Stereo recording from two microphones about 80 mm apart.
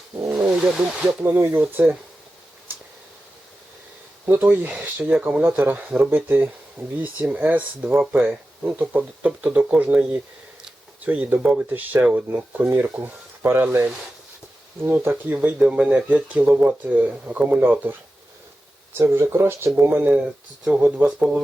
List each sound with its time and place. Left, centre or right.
0.3 s wild animals: right
0.5 s speech: centre
1.3 s speech: right
4.3 s speech: right
5.4 s speech: right
14.8 s speech: right
17.6 s speech: right
18.9 s speech: right